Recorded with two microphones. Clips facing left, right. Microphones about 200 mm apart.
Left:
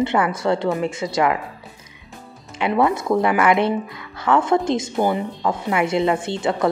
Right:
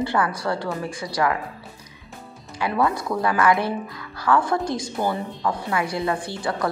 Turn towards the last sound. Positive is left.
turn(degrees=25)  # may be behind; listen again after turning